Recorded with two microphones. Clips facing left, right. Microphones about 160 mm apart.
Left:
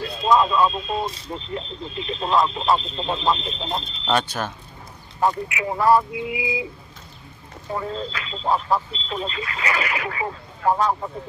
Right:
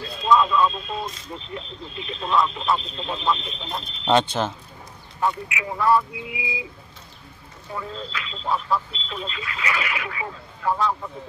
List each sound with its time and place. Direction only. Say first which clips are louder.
0.2 s speech: left 1 dB; 30° left (ahead or behind)
4.0 s speech: right 4 dB; 20° right (ahead or behind)
5.2 s speech: left 3 dB; 35° left (ahead or behind)
7.7 s speech: left 4 dB; 40° left (ahead or behind)